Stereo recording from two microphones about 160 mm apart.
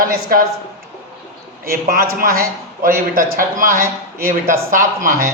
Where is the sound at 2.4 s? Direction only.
60° right (ahead or behind).